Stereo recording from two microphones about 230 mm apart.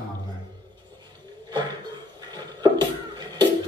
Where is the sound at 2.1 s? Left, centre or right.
Centre.